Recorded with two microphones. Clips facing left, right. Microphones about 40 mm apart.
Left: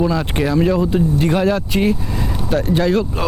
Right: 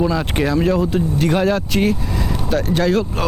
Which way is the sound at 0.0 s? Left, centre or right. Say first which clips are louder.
Even; centre.